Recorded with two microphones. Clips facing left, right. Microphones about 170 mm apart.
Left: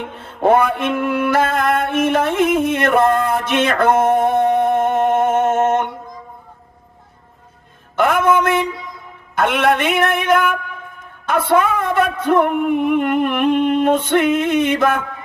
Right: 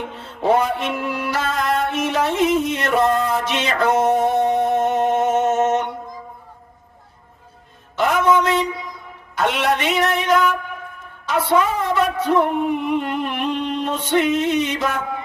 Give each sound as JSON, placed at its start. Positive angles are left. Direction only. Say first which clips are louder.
{"t": 0.2, "sound": "mantra", "louder": "left 4 dB", "side_deg": 55}
{"t": 7.9, "sound": "music", "louder": "left 2 dB", "side_deg": 55}
{"t": 9.3, "sound": "a woman's voice", "louder": "left 4 dB", "side_deg": 55}